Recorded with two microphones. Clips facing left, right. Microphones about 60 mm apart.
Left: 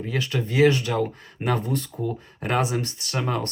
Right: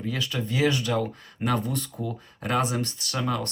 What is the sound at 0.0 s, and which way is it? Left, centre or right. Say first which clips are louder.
Speech: left 3 dB; left.